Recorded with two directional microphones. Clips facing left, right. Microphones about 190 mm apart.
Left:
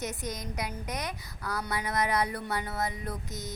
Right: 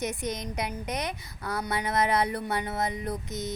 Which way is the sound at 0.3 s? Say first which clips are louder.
Right 4 dB; 20° right (ahead or behind).